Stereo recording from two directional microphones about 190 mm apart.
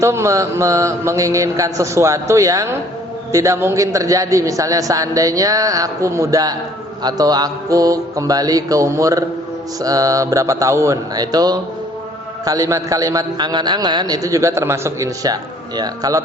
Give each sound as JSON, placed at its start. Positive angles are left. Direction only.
{"t": 0.0, "sound": "a man's voice", "side_deg": -15}